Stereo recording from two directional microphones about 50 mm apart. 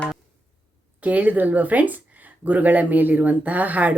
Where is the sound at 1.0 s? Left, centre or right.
Right.